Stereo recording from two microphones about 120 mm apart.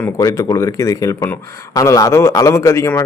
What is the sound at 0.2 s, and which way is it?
A man's voice, 25° left (ahead or behind).